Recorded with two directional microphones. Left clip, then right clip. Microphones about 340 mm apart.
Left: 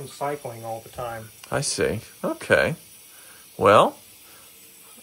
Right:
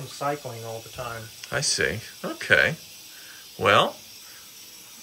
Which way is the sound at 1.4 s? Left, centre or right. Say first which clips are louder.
Even; centre.